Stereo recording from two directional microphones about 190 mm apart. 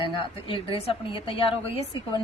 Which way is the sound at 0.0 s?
30° left (ahead or behind).